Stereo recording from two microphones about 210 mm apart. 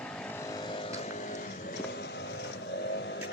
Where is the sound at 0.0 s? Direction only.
10° left (ahead or behind); by 1.4 s 35° left (ahead or behind).